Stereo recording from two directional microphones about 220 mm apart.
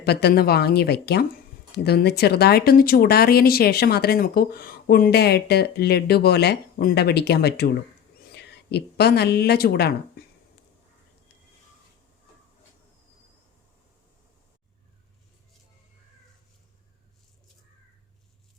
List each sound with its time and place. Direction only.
0.0 s speech: 45° left (ahead or behind)